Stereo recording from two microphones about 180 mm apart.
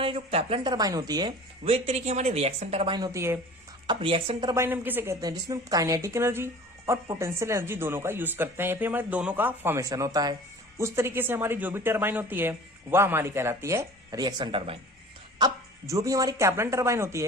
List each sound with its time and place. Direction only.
0.0 s speech: 30° right (ahead or behind)
1.6 s a woman's voice: 35° right (ahead or behind); by 3.3 s 15° right (ahead or behind)
3.8 s speech: 30° right (ahead or behind)
4.5 s a woman's voice: 10° right (ahead or behind)